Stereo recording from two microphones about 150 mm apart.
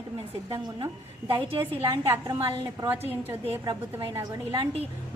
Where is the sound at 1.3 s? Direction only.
35° right (ahead or behind).